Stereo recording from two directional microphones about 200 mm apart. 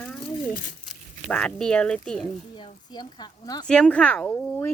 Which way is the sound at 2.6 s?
25° left (ahead or behind).